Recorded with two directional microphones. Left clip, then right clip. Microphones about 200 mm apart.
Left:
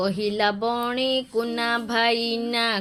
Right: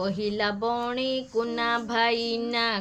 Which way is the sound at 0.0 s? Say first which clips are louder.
Left 4 dB; 30° left (ahead or behind).